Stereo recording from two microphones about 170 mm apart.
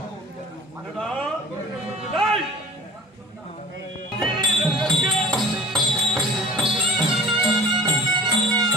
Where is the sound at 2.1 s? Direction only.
Centre (ahead or behind).